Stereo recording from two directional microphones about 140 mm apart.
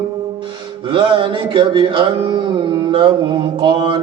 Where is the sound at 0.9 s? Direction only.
40° right (ahead or behind).